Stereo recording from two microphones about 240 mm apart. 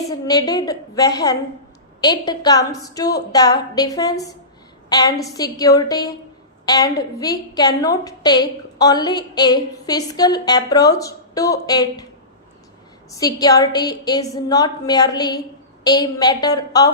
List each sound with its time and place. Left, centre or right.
0.3 s a woman's voice: centre
13.1 s a woman's voice: centre